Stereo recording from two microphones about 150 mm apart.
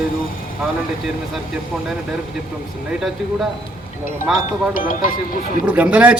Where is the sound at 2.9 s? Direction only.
5° right (ahead or behind).